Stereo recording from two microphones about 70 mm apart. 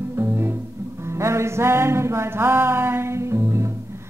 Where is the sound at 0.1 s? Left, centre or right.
Right.